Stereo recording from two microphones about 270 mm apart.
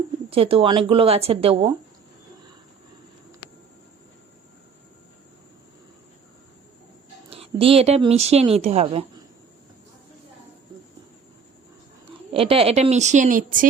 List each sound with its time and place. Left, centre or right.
0.3 s speech: right
7.3 s a woman's voice: right
12.3 s speech: right